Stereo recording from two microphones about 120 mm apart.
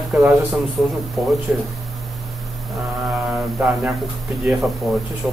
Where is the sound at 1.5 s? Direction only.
5° right (ahead or behind).